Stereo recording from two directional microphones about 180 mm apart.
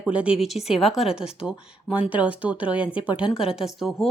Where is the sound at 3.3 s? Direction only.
5° right (ahead or behind).